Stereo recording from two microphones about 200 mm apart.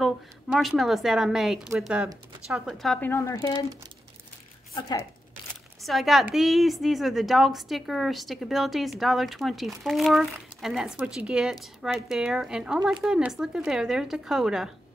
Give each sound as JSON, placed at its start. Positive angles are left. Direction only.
{"t": 0.0, "sound": "a woman's voice", "side_deg": 0}
{"t": 4.7, "sound": "speech", "side_deg": 15}
{"t": 5.8, "sound": "a woman's voice", "side_deg": 0}